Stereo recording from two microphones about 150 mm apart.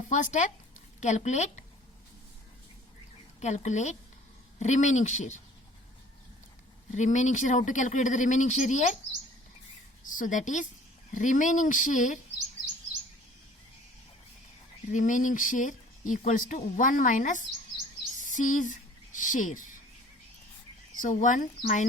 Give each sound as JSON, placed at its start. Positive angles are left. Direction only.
{"t": 0.1, "sound": "speech", "side_deg": 55}
{"t": 3.4, "sound": "speech", "side_deg": 50}
{"t": 6.9, "sound": "speech", "side_deg": 55}
{"t": 10.0, "sound": "speech", "side_deg": 60}
{"t": 14.9, "sound": "speech", "side_deg": 55}
{"t": 21.0, "sound": "speech", "side_deg": 60}